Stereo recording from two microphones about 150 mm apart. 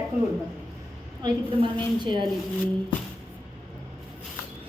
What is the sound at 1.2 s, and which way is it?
A woman's voice, 30° right (ahead or behind).